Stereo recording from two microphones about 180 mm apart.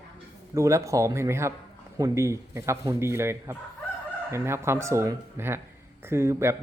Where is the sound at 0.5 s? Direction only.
15° right (ahead or behind).